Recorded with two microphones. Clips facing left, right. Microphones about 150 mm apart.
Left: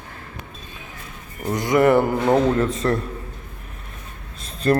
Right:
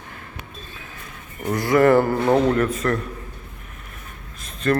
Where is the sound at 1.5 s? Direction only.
20° left (ahead or behind).